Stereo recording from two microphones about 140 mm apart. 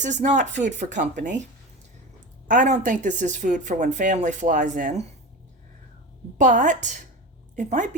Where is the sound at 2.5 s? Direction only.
65° right (ahead or behind).